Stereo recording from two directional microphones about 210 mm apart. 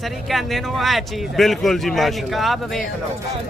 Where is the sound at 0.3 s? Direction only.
Centre (ahead or behind).